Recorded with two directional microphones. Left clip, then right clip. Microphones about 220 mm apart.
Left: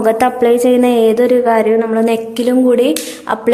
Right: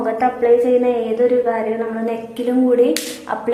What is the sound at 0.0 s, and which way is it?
Speech, 50° left (ahead or behind).